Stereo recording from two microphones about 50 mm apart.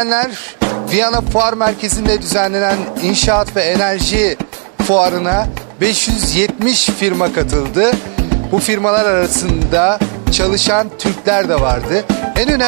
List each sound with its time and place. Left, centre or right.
0.0 s speech: right